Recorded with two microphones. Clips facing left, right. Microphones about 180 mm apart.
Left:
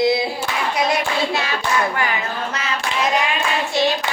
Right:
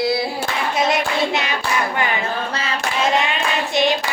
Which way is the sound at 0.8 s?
20° right (ahead or behind).